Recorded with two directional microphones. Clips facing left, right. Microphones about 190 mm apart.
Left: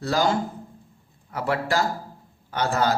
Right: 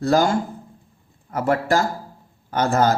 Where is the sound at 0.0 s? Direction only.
50° right (ahead or behind).